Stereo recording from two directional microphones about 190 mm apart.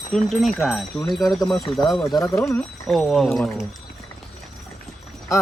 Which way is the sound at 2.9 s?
Centre (ahead or behind).